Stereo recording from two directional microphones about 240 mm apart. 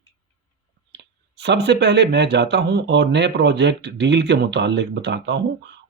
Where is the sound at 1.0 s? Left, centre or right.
Right.